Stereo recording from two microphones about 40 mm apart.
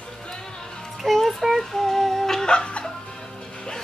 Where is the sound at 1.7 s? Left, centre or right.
Centre.